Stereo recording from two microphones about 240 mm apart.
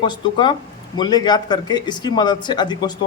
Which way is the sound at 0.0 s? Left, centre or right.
Centre.